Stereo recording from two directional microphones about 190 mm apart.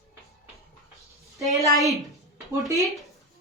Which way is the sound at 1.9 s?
15° right (ahead or behind).